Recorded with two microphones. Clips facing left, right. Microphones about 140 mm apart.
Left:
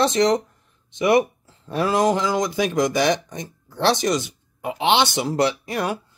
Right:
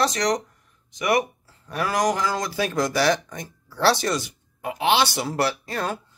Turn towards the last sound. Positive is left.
turn(degrees=15)  # may be behind; listen again after turning